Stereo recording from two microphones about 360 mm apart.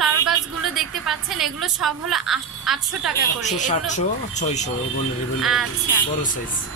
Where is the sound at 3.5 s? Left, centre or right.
Centre.